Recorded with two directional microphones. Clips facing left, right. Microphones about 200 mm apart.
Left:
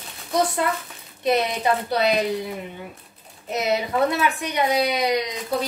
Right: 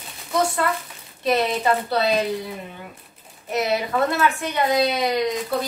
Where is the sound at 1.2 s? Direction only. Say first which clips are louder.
Right 1 dB; 15° left (ahead or behind).